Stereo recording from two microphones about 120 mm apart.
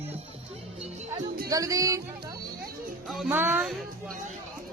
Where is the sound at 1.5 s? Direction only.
30° right (ahead or behind).